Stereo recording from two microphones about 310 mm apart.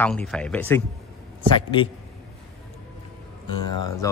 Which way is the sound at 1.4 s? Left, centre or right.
Centre.